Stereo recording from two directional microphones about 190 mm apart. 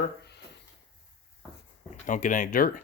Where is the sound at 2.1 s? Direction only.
45° left (ahead or behind).